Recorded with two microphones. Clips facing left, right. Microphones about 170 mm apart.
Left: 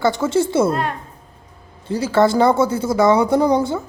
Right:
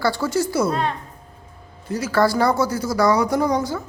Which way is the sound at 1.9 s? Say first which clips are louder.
Left 3 dB; 30° left (ahead or behind).